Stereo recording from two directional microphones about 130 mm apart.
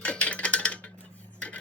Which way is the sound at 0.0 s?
10° left (ahead or behind).